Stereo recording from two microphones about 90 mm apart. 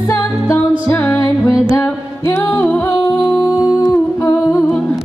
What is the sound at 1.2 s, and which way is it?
Music, 40° left (ahead or behind).